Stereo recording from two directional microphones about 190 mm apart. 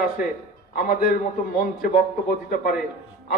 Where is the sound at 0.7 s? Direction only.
45° left (ahead or behind).